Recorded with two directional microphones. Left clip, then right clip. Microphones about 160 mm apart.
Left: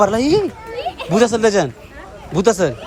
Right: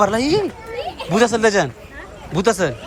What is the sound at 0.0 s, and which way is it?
Speech, 25° left (ahead or behind).